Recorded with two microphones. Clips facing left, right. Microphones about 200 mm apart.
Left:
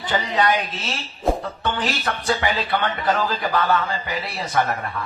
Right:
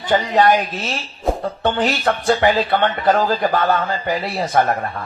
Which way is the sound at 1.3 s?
Centre (ahead or behind).